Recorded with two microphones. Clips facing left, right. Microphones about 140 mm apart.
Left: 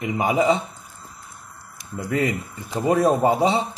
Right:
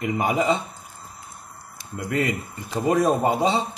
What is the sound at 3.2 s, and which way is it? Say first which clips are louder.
Speech: left 3 dB; 30° left (ahead or behind).